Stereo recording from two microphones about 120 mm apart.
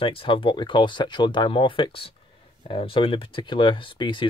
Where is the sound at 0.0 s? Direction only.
50° left (ahead or behind).